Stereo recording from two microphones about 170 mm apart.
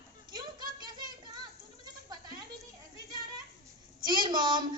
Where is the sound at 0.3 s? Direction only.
25° right (ahead or behind).